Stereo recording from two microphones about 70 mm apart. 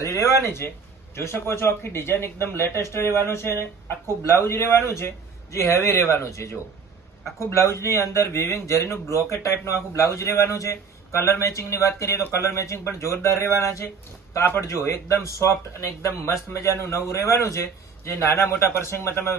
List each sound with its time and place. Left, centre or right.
0.0 s speech: left